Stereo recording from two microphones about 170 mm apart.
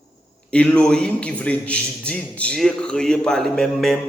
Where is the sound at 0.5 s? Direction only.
5° left (ahead or behind).